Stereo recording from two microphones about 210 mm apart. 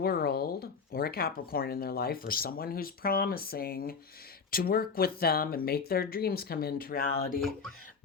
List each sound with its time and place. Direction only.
0.0 s speech: 45° left (ahead or behind)